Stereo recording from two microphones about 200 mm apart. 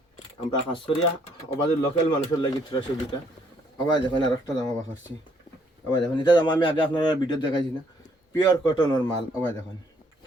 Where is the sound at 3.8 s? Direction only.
20° left (ahead or behind).